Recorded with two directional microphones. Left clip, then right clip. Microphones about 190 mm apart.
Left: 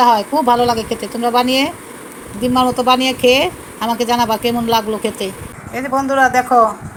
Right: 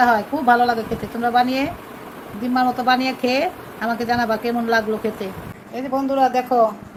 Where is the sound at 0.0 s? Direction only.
15° left (ahead or behind).